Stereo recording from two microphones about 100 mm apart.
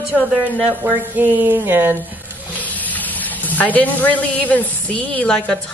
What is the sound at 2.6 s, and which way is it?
Speech, 15° left (ahead or behind).